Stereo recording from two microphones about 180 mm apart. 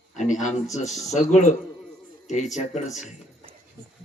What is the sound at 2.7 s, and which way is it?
Speech, 40° left (ahead or behind).